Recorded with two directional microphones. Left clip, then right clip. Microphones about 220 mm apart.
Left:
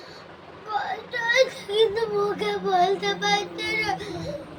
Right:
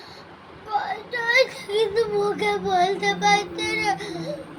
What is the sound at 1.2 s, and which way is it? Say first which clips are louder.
Speech: right 1 dB; 20° left (ahead or behind).